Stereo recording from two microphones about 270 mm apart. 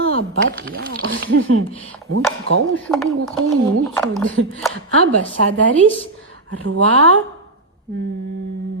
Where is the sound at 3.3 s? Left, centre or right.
Right.